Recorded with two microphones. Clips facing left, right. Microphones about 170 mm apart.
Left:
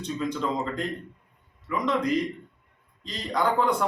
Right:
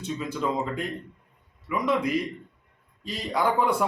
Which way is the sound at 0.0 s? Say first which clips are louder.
Even; 5° right (ahead or behind).